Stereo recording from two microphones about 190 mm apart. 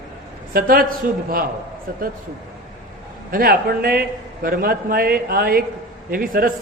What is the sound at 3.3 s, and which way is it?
A man's voice, 50° right (ahead or behind).